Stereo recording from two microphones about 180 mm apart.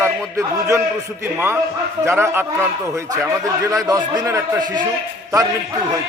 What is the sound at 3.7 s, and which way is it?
A man's voice, 20° right (ahead or behind).